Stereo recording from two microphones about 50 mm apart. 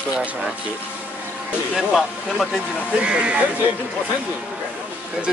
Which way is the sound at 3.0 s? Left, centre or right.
Right.